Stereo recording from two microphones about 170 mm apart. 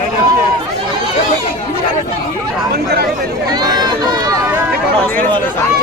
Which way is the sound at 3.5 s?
25° right (ahead or behind).